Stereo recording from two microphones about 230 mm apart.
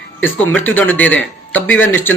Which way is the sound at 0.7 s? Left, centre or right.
Centre.